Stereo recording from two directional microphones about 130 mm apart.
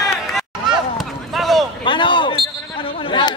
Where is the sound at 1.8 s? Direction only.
40° left (ahead or behind).